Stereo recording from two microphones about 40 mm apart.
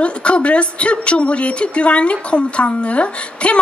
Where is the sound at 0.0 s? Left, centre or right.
Left.